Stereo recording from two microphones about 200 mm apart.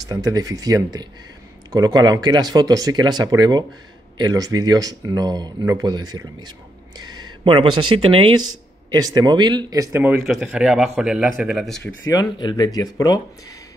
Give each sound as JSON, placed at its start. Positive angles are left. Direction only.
{"t": 0.1, "sound": "speech", "side_deg": -15}
{"t": 7.0, "sound": "a sound", "side_deg": -20}
{"t": 7.7, "sound": "speech", "side_deg": -90}
{"t": 8.0, "sound": "speech", "side_deg": -25}
{"t": 10.2, "sound": "a man's voice", "side_deg": 0}
{"t": 12.1, "sound": "speech", "side_deg": 20}